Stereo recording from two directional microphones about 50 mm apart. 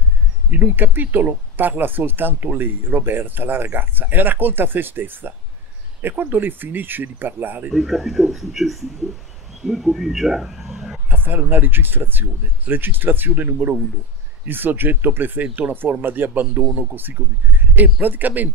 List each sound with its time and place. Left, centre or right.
0.5 s speech: right
7.7 s a man's voice: centre
11.1 s speech: right